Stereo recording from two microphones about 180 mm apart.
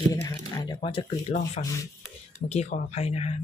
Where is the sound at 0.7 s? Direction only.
30° left (ahead or behind).